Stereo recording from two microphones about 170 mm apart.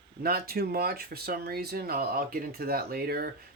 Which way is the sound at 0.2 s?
65° right (ahead or behind).